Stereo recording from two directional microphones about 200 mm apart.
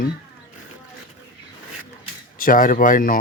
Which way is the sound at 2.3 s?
45° left (ahead or behind).